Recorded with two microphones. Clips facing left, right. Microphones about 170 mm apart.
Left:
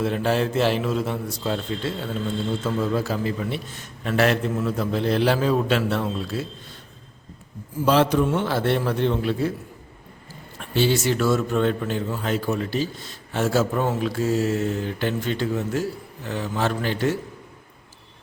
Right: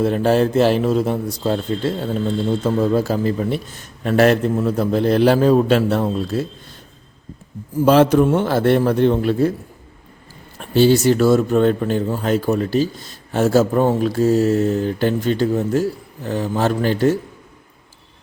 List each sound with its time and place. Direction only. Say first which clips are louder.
0.0 s a man's voice: right 6 dB; 40° right (ahead or behind)
7.9 s a man's voice: right 6 dB; 50° right (ahead or behind)
10.6 s a man's voice: right 8 dB; 40° right (ahead or behind)